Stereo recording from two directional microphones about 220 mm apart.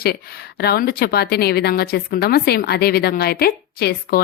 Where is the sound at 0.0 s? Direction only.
45° left (ahead or behind).